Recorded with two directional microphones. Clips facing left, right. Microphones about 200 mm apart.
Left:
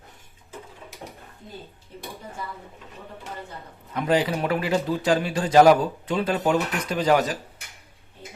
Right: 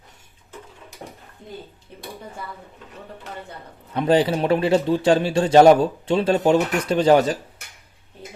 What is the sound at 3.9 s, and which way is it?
A man's voice, 30° right (ahead or behind).